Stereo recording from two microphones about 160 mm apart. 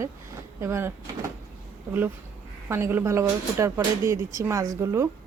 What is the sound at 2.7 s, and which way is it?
Speech, 15° right (ahead or behind).